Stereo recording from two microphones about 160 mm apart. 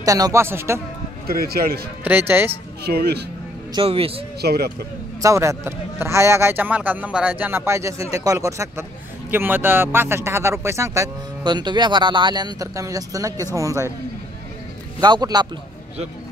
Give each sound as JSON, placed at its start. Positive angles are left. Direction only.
{"t": 0.0, "sound": "a man's voice", "side_deg": -20}
{"t": 1.2, "sound": "speech", "side_deg": -70}
{"t": 2.0, "sound": "a man's voice", "side_deg": -15}
{"t": 2.8, "sound": "speech", "side_deg": -85}
{"t": 3.7, "sound": "speech", "side_deg": -35}
{"t": 4.4, "sound": "speech", "side_deg": -80}
{"t": 5.2, "sound": "a man's voice", "side_deg": -20}
{"t": 15.0, "sound": "speech", "side_deg": -25}